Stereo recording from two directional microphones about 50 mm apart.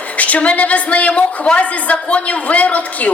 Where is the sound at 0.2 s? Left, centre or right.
Left.